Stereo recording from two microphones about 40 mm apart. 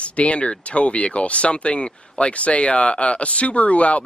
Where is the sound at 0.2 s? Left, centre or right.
Left.